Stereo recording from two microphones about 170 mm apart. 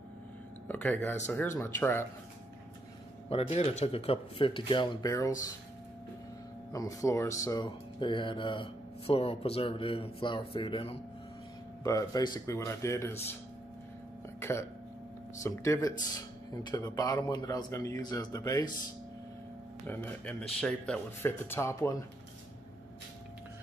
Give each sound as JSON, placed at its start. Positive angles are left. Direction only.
{"t": 0.7, "sound": "speech", "side_deg": 10}
{"t": 3.3, "sound": "speech", "side_deg": 35}
{"t": 6.7, "sound": "speech", "side_deg": 20}
{"t": 11.8, "sound": "speech", "side_deg": 20}
{"t": 14.4, "sound": "speech", "side_deg": 15}
{"t": 20.6, "sound": "speech", "side_deg": 5}